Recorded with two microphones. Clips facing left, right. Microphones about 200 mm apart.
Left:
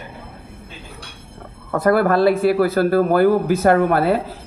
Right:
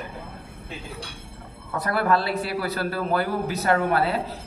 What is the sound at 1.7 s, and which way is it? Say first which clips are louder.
A man's voice: left 8 dB; 50° left (ahead or behind).